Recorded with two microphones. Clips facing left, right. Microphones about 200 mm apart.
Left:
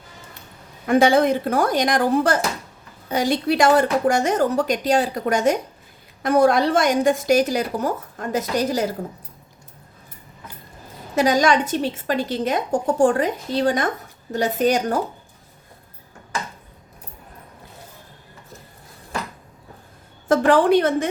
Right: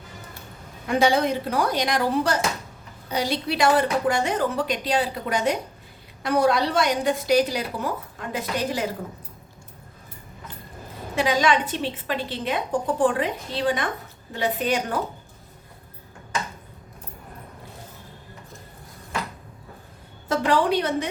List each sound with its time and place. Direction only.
0.9 s a woman's voice: 50° left (ahead or behind)
11.1 s a woman's voice: 45° left (ahead or behind)
20.2 s a woman's voice: 50° left (ahead or behind)